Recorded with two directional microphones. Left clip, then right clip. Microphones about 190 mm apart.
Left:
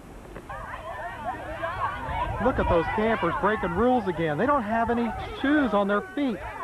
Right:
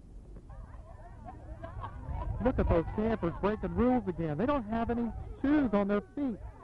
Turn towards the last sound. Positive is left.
turn(degrees=20)  # may be behind; listen again after turning